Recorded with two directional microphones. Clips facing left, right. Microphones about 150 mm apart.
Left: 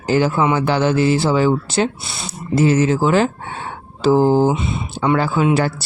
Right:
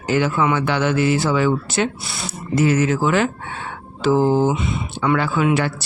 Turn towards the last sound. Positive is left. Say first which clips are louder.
# left 2 dB
turn(degrees=35)  # may be behind; listen again after turning